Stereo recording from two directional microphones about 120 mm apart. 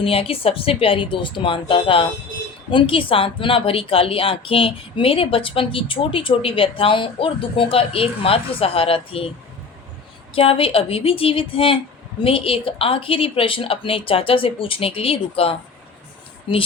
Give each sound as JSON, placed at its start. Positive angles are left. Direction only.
{"t": 0.0, "sound": "speech", "side_deg": 50}
{"t": 10.3, "sound": "speech", "side_deg": 50}
{"t": 16.5, "sound": "speech", "side_deg": 40}